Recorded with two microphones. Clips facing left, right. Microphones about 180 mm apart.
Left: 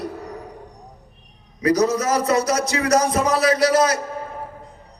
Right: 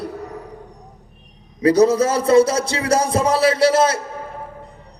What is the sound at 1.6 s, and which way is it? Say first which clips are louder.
Speech: right 5 dB; 30° right (ahead or behind).